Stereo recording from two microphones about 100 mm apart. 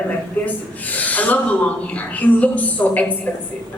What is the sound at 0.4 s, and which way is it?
A woman's voice, 15° left (ahead or behind).